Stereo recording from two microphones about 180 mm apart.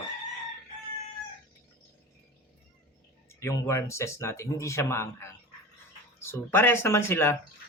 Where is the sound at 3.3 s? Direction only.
15° left (ahead or behind).